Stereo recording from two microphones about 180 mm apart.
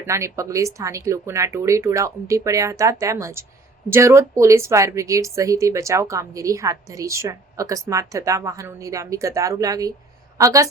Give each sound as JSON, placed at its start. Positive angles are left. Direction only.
{"t": 0.0, "sound": "a woman's voice", "side_deg": -15}